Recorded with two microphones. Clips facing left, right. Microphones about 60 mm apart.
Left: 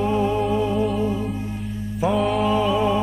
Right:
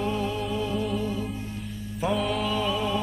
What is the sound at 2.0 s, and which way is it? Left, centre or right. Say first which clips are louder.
Music: left 6 dB; centre.